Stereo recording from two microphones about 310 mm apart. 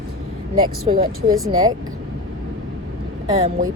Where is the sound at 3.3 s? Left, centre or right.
Right.